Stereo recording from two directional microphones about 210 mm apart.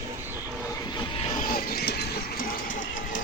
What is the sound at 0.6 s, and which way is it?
Vehicle, 15° left (ahead or behind).